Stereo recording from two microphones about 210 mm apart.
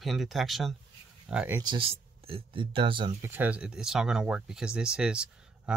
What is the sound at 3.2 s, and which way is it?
Speech, 10° right (ahead or behind).